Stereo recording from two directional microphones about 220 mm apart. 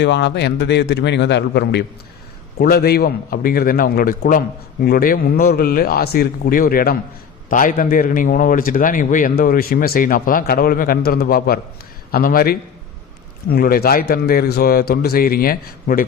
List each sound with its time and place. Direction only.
0.0 s a man's voice: 50° left (ahead or behind)